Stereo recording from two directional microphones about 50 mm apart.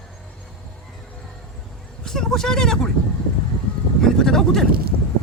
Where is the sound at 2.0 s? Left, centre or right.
Centre.